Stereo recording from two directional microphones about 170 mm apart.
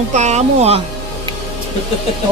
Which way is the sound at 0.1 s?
40° right (ahead or behind).